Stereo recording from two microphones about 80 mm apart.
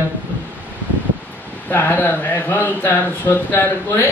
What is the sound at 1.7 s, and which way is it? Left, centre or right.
Speech, left.